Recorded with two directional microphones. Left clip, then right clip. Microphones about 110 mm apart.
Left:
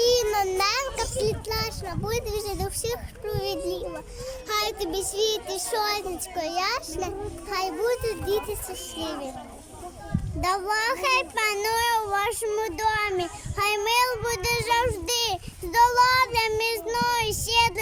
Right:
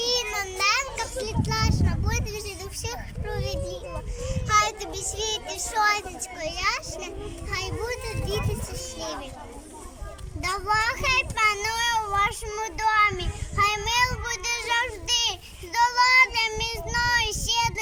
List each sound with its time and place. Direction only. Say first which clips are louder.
0.0 s child singing: left 5 dB; 50° left (ahead or behind)
7.5 s a child's voice: left 5 dB; 45° left (ahead or behind)
10.4 s a child's voice: even; 40° left (ahead or behind)